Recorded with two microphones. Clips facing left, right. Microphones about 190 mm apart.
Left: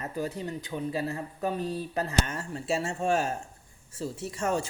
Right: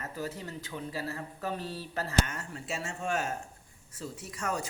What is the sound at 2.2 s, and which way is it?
Speech, 30° left (ahead or behind).